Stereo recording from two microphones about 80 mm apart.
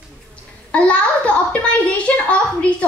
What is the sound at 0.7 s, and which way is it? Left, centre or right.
A child's voice, centre.